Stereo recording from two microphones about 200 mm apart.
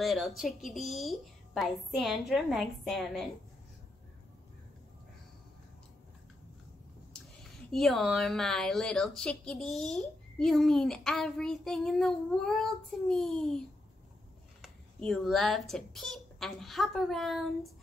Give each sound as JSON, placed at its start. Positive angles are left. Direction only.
{"t": 0.0, "sound": "a woman's voice", "side_deg": 0}
{"t": 7.7, "sound": "a woman's voice", "side_deg": 0}
{"t": 14.6, "sound": "speech", "side_deg": 5}